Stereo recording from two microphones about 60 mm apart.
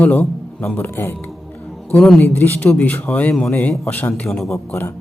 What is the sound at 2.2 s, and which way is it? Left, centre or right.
Speech, left.